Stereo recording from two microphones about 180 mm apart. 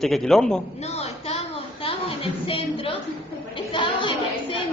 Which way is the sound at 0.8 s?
35° left (ahead or behind).